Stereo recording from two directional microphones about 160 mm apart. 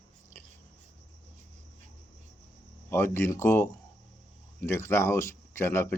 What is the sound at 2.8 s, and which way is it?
Speech, 15° left (ahead or behind).